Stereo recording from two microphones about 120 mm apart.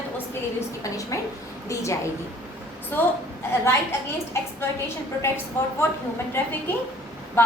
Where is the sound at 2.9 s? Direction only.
15° left (ahead or behind).